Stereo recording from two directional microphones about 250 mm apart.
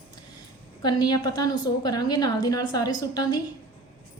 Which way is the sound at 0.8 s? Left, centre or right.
Centre.